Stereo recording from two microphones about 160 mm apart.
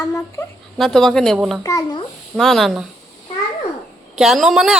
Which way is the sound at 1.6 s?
20° left (ahead or behind).